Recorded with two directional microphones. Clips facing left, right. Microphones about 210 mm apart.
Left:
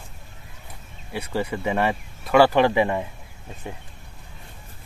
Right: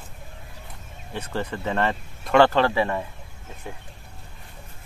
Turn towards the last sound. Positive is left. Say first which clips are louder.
# left 2 dB
turn(degrees=20)  # may be behind; listen again after turning